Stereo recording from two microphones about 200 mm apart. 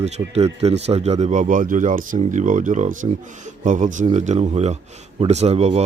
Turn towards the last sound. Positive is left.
turn(degrees=-30)  # may be behind; listen again after turning